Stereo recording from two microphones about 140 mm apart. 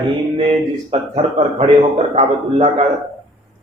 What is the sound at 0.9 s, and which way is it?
A man's voice, 45° right (ahead or behind).